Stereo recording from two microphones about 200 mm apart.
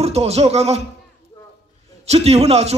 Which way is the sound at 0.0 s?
30° right (ahead or behind).